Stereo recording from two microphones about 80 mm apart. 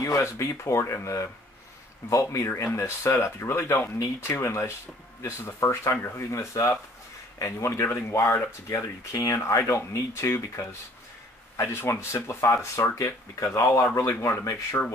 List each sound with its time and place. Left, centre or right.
0.0 s speech: left